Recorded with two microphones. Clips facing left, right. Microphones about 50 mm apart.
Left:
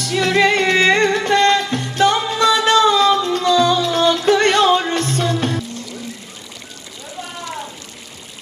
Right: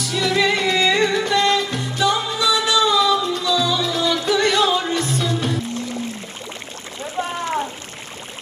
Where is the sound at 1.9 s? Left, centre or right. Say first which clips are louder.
Left 4 dB; left.